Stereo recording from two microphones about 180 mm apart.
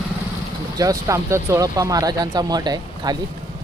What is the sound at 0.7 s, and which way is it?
Speech, 20° right (ahead or behind).